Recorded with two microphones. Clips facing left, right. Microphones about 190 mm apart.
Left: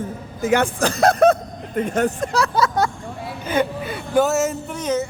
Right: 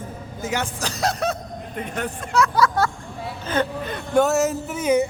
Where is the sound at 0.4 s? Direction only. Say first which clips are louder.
Left 9 dB; 55° left (ahead or behind); by 2.5 s 40° left (ahead or behind).